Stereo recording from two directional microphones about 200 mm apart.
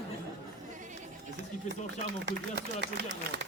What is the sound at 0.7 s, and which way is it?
Speech, 40° right (ahead or behind).